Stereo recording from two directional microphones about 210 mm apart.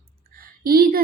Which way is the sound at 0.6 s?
45° right (ahead or behind).